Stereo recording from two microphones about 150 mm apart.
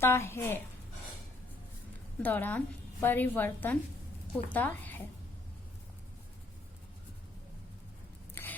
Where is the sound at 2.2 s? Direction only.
10° left (ahead or behind).